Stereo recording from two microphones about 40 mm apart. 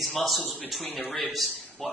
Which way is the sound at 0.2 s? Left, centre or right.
Centre.